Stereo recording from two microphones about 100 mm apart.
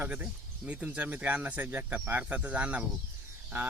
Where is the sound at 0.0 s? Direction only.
15° right (ahead or behind).